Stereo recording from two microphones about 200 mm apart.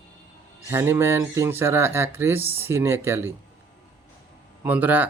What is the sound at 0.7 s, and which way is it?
Speech, 10° right (ahead or behind).